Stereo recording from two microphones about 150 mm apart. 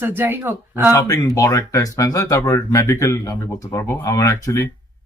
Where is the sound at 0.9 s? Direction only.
20° left (ahead or behind).